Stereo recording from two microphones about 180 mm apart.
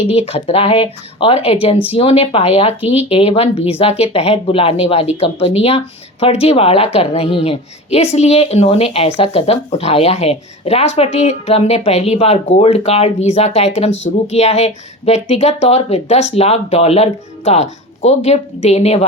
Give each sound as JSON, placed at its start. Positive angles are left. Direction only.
{"t": 0.0, "sound": "speech", "side_deg": 35}
{"t": 2.8, "sound": "speech", "side_deg": -10}
{"t": 3.1, "sound": "speech", "side_deg": 35}